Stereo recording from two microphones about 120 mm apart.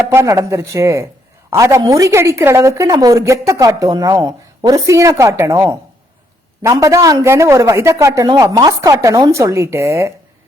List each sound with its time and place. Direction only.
0.1 s a man's voice: 25° right (ahead or behind)